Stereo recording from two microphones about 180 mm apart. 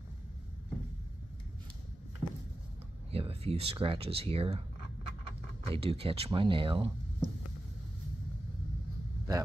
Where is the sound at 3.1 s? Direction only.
30° right (ahead or behind).